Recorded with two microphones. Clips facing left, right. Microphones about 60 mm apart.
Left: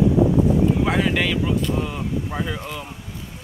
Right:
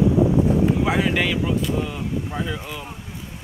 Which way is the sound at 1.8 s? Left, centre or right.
Centre.